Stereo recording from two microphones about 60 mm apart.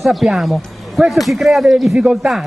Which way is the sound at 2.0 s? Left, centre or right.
Centre.